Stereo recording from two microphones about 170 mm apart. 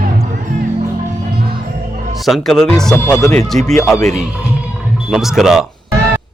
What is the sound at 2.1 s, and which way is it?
Speech, centre (ahead or behind).